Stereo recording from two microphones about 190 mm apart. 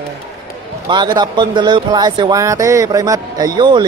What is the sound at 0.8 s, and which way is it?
Speech, 25° right (ahead or behind).